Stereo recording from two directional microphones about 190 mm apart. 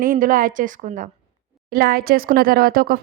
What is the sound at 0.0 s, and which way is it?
Speech, 45° right (ahead or behind).